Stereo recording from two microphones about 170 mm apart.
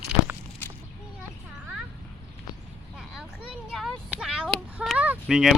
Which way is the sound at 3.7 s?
Centre (ahead or behind).